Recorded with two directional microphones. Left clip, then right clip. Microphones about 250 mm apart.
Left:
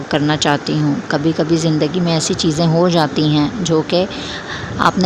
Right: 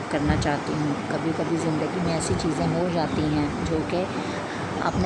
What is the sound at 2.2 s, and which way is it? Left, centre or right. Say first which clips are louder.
Speech: left 8 dB; left.